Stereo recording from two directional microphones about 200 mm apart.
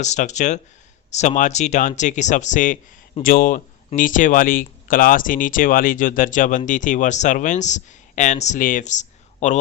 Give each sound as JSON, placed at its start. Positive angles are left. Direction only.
{"t": 0.0, "sound": "speech", "side_deg": 35}